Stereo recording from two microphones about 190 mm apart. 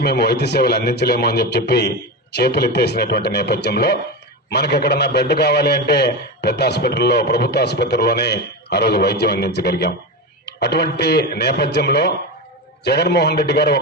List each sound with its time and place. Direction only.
0.0 s a man's voice: 60° left (ahead or behind)